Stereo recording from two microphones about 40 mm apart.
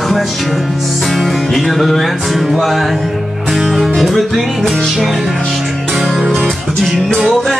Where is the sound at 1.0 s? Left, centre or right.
Centre.